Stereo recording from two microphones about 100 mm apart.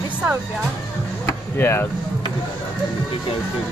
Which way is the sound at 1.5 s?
25° left (ahead or behind).